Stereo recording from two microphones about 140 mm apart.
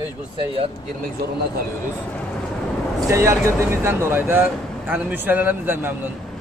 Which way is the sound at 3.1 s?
20° right (ahead or behind).